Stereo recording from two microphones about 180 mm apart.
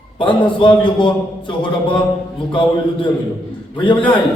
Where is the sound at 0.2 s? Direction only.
25° left (ahead or behind).